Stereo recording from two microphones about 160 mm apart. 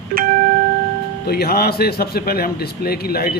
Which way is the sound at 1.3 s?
75° left (ahead or behind).